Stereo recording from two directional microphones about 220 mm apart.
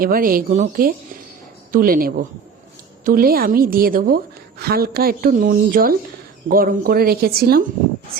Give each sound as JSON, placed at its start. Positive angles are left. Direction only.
{"t": 0.0, "sound": "a woman's voice", "side_deg": -40}